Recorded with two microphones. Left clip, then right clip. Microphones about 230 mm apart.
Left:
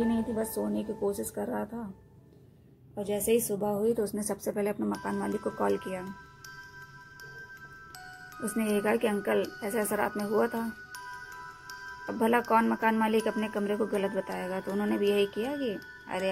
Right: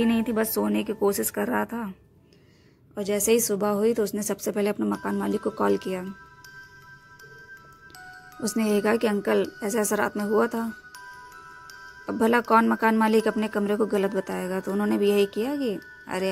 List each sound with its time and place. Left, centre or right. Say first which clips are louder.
0.6 s speech: right 7 dB; right
1.0 s speech: right 8 dB; right
3.0 s speech: right 5 dB; right
4.4 s speech: right 5 dB; right
8.4 s speech: right 5 dB; right
12.1 s speech: right 5 dB; right